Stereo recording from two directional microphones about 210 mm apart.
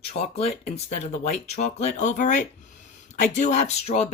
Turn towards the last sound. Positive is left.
turn(degrees=30)  # may be behind; listen again after turning